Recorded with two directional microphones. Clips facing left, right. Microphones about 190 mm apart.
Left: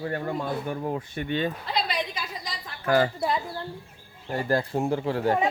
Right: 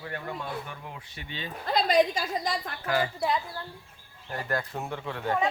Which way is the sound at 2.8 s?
45° left (ahead or behind).